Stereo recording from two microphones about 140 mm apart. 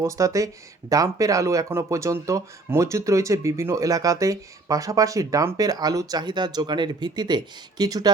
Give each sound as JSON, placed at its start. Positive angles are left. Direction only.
{"t": 0.0, "sound": "speech", "side_deg": -25}